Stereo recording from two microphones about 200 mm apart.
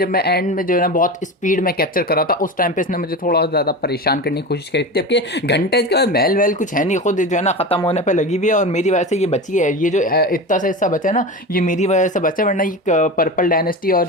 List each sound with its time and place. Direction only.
0.0 s speech: 50° left (ahead or behind)